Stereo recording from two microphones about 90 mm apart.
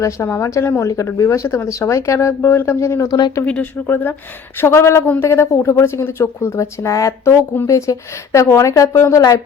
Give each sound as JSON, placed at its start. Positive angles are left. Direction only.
{"t": 0.0, "sound": "a woman's voice", "side_deg": 30}
{"t": 3.1, "sound": "speech", "side_deg": 50}
{"t": 3.4, "sound": "speech", "side_deg": 15}
{"t": 3.8, "sound": "a woman's voice", "side_deg": 25}